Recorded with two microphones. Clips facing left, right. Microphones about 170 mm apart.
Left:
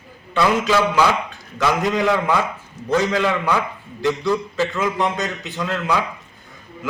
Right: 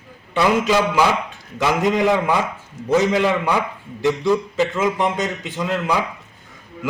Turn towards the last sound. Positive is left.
turn(degrees=-15)  # may be behind; listen again after turning